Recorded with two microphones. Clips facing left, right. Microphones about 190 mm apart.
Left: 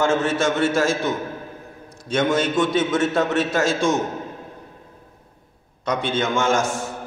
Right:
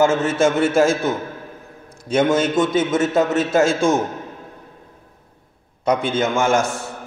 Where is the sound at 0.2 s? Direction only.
25° right (ahead or behind).